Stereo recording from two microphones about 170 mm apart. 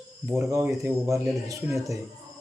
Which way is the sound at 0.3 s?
20° right (ahead or behind).